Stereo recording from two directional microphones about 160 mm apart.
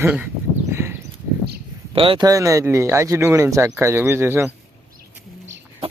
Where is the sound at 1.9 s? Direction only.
35° right (ahead or behind); by 4.5 s 15° right (ahead or behind).